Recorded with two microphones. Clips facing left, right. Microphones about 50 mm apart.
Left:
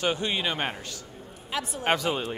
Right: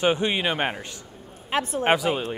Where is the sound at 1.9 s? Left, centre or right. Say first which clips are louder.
Right 1 dB; centre.